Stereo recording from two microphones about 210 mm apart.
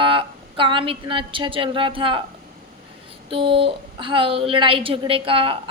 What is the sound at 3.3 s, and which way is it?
A woman's voice, 25° right (ahead or behind).